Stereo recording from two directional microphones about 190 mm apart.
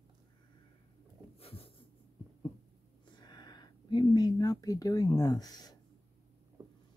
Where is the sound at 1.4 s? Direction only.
30° left (ahead or behind).